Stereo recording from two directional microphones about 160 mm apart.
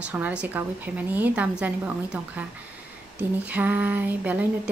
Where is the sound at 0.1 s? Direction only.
10° right (ahead or behind).